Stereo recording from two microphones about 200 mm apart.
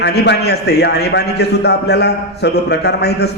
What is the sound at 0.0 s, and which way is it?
A man's voice, 55° left (ahead or behind).